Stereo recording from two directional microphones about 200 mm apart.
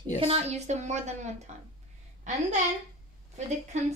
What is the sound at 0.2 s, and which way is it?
A woman's voice, 30° right (ahead or behind).